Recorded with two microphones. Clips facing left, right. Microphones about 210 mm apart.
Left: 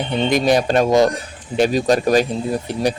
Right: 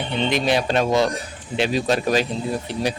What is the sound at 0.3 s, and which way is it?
Speech, 45° left (ahead or behind).